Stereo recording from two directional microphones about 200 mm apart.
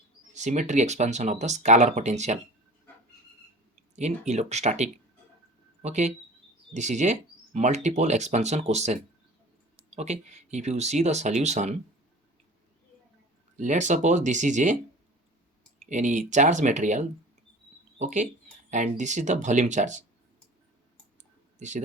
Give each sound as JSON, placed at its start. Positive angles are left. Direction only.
{"t": 0.3, "sound": "speech", "side_deg": -35}
{"t": 3.9, "sound": "speech", "side_deg": -35}
{"t": 13.6, "sound": "speech", "side_deg": -35}
{"t": 15.9, "sound": "speech", "side_deg": -40}